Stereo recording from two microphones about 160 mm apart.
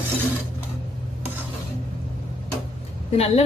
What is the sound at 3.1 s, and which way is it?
Speech, 40° left (ahead or behind).